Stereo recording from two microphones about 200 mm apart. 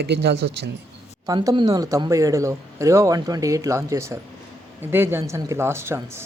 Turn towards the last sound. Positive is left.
turn(degrees=-15)  # may be behind; listen again after turning